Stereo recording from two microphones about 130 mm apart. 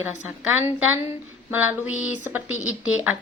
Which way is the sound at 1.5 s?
15° right (ahead or behind).